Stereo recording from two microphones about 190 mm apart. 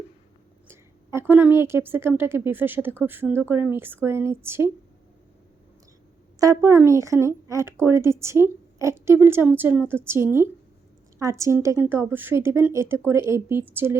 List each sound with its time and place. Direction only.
0.7 s a woman's voice: 10° right (ahead or behind)
6.4 s speech: 15° right (ahead or behind)